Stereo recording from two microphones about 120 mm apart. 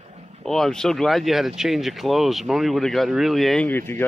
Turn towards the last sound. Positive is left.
turn(degrees=15)  # may be behind; listen again after turning